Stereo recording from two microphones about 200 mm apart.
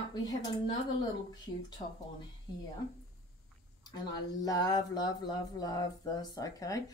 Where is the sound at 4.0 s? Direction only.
20° left (ahead or behind).